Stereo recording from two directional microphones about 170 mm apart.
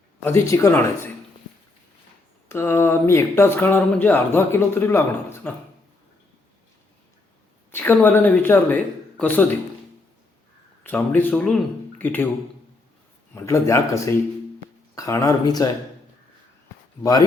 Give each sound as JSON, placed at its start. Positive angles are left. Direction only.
{"t": 0.3, "sound": "speech", "side_deg": 15}
{"t": 2.5, "sound": "speech", "side_deg": 15}
{"t": 7.7, "sound": "speech", "side_deg": 10}
{"t": 10.8, "sound": "speech", "side_deg": 10}
{"t": 13.3, "sound": "speech", "side_deg": 15}
{"t": 17.0, "sound": "speech", "side_deg": 20}